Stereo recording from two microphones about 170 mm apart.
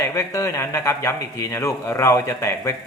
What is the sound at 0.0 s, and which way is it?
A man's voice, 15° left (ahead or behind).